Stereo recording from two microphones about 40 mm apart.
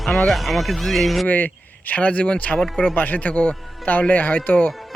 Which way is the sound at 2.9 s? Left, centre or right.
Left.